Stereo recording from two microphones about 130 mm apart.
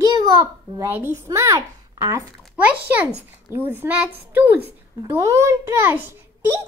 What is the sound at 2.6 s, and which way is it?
A child's voice, 15° right (ahead or behind).